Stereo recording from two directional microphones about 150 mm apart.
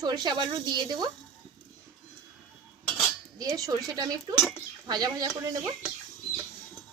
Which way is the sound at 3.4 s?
25° right (ahead or behind).